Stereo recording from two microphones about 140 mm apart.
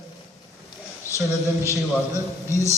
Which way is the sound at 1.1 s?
20° left (ahead or behind).